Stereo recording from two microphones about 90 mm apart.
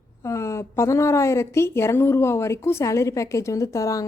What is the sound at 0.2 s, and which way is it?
A woman's voice, 35° left (ahead or behind).